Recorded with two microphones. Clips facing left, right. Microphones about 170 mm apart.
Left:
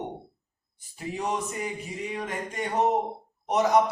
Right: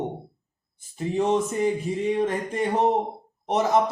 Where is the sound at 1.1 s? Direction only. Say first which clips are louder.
Right 8 dB; 25° right (ahead or behind).